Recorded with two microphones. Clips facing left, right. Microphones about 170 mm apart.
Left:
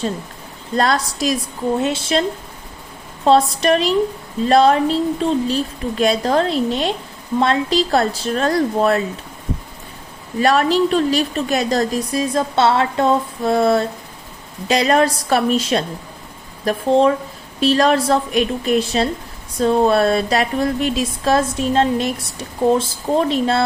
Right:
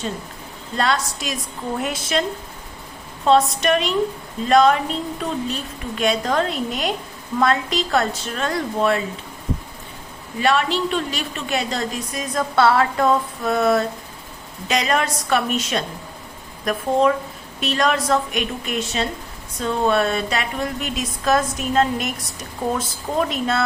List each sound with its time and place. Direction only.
0.8 s a woman's voice: 40° left (ahead or behind)
3.2 s speech: 35° left (ahead or behind)
10.4 s speech: 40° left (ahead or behind)